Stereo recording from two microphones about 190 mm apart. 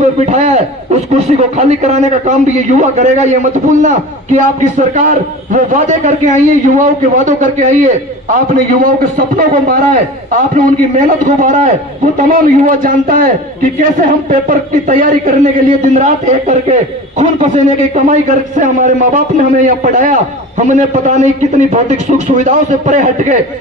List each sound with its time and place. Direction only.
0.2 s a sound: 35° right (ahead or behind)
1.1 s a man's voice: 35° right (ahead or behind)
14.5 s a man's voice: 45° right (ahead or behind)